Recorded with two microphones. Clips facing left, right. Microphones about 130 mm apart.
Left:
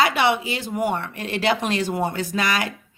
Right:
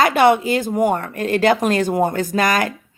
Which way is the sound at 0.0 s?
45° right (ahead or behind).